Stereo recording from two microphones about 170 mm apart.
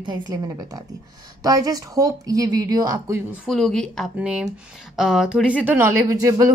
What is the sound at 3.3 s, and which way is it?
Speech, centre (ahead or behind).